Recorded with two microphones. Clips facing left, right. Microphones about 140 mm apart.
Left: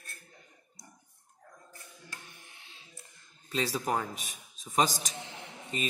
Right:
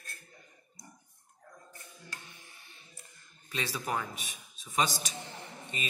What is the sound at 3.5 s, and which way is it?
A man's voice, 35° left (ahead or behind).